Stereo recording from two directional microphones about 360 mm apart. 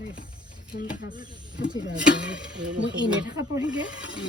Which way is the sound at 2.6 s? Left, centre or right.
Right.